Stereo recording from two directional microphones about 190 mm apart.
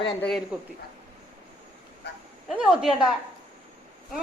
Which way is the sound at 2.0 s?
60° left (ahead or behind).